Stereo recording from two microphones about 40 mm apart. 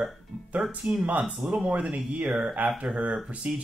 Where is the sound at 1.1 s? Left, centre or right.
Right.